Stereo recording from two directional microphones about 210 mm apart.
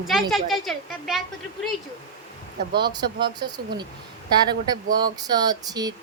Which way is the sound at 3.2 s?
20° right (ahead or behind).